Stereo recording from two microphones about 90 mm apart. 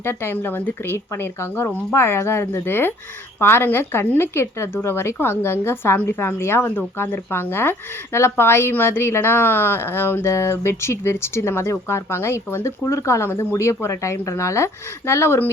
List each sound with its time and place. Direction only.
0.0 s speech: 25° left (ahead or behind)